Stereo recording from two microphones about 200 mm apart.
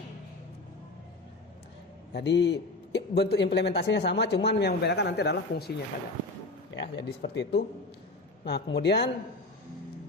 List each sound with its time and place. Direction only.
2.1 s a man's voice: 55° left (ahead or behind)
6.7 s a man's voice: 60° left (ahead or behind)